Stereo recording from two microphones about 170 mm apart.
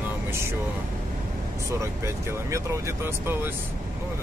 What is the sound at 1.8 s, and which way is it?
Speech, 15° right (ahead or behind).